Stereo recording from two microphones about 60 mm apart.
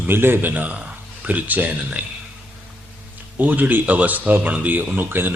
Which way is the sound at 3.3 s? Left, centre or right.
Right.